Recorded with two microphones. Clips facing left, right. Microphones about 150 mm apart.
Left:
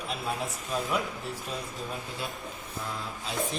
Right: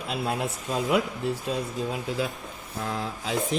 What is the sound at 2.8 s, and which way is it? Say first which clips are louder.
Speech: right 7 dB; 90° right.